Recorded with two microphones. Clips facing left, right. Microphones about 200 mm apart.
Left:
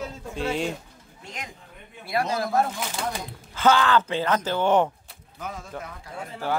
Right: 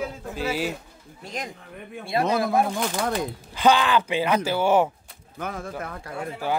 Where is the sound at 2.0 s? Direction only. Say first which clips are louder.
Right 3 dB; 25° right (ahead or behind); by 4.9 s 10° right (ahead or behind).